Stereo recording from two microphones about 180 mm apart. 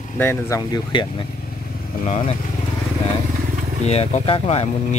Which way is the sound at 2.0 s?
40° left (ahead or behind).